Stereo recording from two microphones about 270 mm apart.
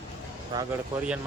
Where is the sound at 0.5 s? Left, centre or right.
Centre.